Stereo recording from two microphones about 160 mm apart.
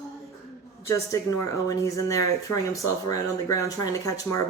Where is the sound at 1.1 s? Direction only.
20° left (ahead or behind).